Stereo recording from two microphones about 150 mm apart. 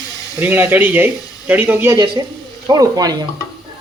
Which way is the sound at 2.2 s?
25° right (ahead or behind).